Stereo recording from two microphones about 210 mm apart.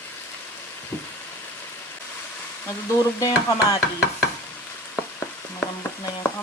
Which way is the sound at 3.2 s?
15° left (ahead or behind).